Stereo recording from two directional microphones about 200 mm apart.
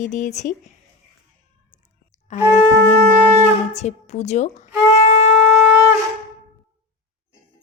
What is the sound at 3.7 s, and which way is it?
Speech, 35° left (ahead or behind).